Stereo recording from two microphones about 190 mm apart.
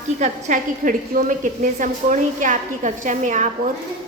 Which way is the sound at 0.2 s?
40° right (ahead or behind).